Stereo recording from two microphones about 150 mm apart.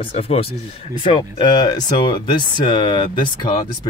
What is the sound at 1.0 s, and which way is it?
Speech, 30° left (ahead or behind).